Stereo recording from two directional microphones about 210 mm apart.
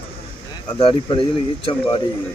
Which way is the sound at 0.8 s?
25° left (ahead or behind).